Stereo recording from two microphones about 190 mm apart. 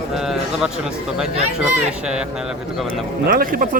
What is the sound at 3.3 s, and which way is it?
Speech, 50° right (ahead or behind).